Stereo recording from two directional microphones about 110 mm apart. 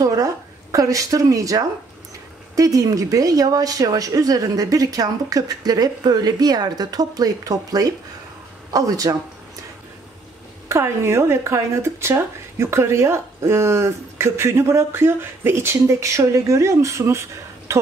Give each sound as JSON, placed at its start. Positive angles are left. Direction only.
{"t": 0.0, "sound": "speech", "side_deg": -30}
{"t": 10.7, "sound": "speech", "side_deg": -25}